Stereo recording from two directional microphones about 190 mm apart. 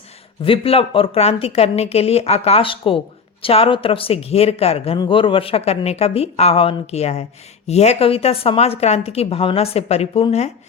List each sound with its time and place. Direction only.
0.4 s speech: 30° left (ahead or behind)